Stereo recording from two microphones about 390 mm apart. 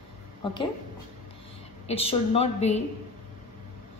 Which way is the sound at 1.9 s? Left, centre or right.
Centre.